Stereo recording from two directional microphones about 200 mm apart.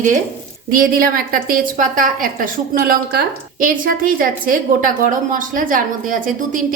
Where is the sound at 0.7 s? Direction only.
45° right (ahead or behind).